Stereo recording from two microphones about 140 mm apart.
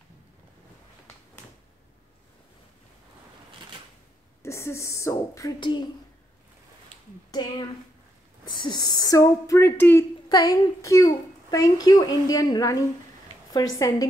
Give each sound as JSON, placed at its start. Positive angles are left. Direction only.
{"t": 4.4, "sound": "a child's voice", "side_deg": 20}
{"t": 5.6, "sound": "a child's voice", "side_deg": 35}
{"t": 7.2, "sound": "a child's voice", "side_deg": 30}